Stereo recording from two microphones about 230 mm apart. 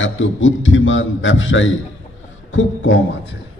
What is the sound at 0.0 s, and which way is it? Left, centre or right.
A man's voice, left.